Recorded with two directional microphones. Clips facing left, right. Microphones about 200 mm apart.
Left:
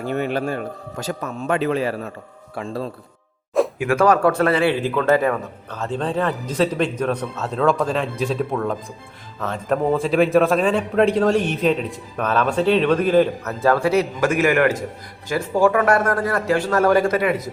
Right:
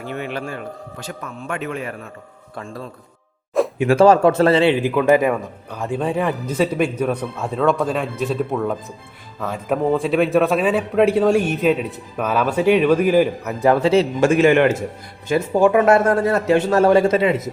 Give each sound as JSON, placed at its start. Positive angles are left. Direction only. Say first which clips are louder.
{"t": 0.0, "sound": "a man's voice", "louder": "left 5 dB", "side_deg": 40}
{"t": 3.8, "sound": "a man's voice", "louder": "right 6 dB", "side_deg": -30}